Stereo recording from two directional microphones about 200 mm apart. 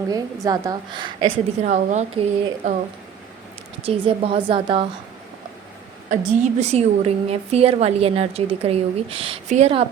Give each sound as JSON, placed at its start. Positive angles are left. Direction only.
{"t": 0.1, "sound": "a woman's voice", "side_deg": -20}
{"t": 1.2, "sound": "a woman's voice", "side_deg": -40}
{"t": 3.8, "sound": "a woman's voice", "side_deg": -30}
{"t": 6.1, "sound": "a woman's voice", "side_deg": -35}